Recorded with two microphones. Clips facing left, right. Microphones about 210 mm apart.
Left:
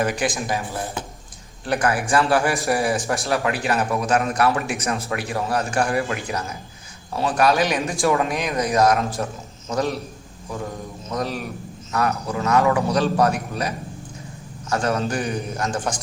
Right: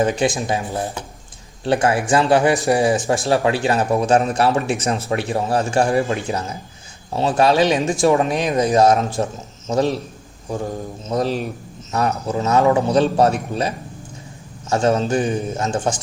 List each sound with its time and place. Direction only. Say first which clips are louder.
0.0 s a man's voice: right 4 dB; 25° right (ahead or behind)